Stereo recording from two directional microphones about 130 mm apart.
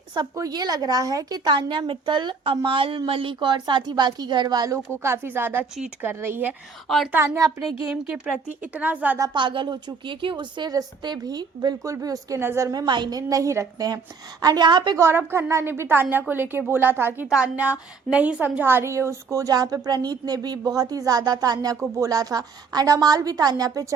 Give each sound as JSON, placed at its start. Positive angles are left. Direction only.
{"t": 0.1, "sound": "a woman's voice", "side_deg": -30}
{"t": 6.8, "sound": "a woman's voice", "side_deg": 0}
{"t": 7.1, "sound": "a woman's voice", "side_deg": -20}
{"t": 7.9, "sound": "speech", "side_deg": -10}
{"t": 9.1, "sound": "a woman's voice", "side_deg": -35}
{"t": 14.9, "sound": "a woman's voice", "side_deg": -20}
{"t": 17.2, "sound": "a woman's voice", "side_deg": -5}